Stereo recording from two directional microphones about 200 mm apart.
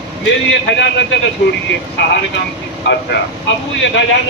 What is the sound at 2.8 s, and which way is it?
Speech, 65° left (ahead or behind).